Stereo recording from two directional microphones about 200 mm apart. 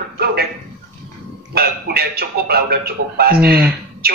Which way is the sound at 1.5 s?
50° right (ahead or behind).